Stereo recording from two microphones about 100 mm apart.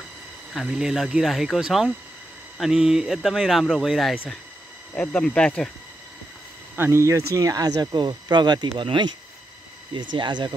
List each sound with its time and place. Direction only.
0.5 s speech: 5° right (ahead or behind)
4.9 s speech: 10° left (ahead or behind)
6.8 s speech: 30° right (ahead or behind); by 10.5 s 50° right (ahead or behind)